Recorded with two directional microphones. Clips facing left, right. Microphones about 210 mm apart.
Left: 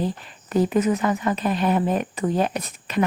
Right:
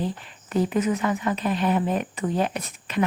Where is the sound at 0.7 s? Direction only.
40° left (ahead or behind).